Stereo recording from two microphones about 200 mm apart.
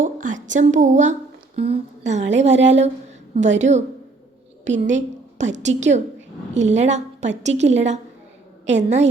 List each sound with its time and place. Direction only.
0.0 s a woman's voice: 40° right (ahead or behind)